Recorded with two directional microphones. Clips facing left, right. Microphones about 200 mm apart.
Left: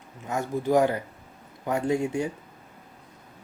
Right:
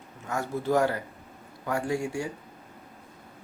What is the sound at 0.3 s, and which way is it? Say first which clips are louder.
Speech: left 2 dB; 15° left (ahead or behind).